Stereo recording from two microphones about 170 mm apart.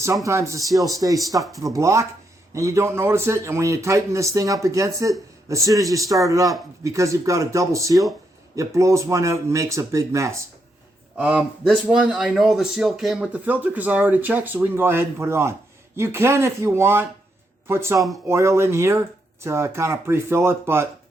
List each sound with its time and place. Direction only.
0.3 s speech: 15° right (ahead or behind)
11.2 s speech: 5° right (ahead or behind)